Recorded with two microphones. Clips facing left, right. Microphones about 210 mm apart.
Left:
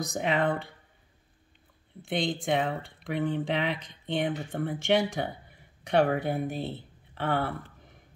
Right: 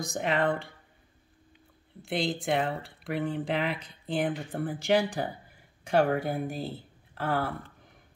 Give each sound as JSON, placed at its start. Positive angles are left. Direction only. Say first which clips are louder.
{"t": 0.1, "sound": "speech", "louder": "even", "side_deg": 0}
{"t": 2.0, "sound": "speech", "louder": "even", "side_deg": 0}